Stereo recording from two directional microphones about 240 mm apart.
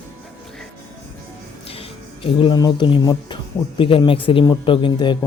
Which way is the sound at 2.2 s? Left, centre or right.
Left.